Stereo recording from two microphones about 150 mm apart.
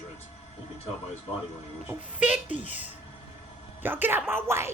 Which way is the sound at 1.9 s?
10° right (ahead or behind).